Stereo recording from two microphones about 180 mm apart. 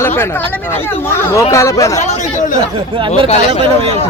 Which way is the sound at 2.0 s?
40° left (ahead or behind).